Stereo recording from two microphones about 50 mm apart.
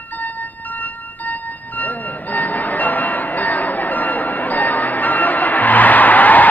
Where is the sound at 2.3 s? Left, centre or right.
Left.